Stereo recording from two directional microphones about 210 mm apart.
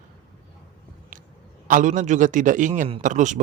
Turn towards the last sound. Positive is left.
turn(degrees=-35)  # may be behind; listen again after turning